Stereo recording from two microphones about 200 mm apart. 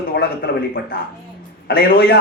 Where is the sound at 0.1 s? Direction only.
50° left (ahead or behind).